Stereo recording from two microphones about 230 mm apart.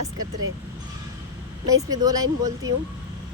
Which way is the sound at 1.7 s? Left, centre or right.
Centre.